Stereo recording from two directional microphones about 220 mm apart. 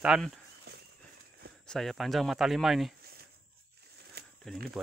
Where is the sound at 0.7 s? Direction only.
45° right (ahead or behind).